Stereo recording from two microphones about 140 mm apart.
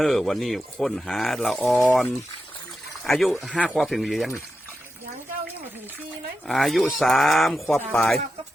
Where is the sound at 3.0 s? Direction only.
Centre (ahead or behind).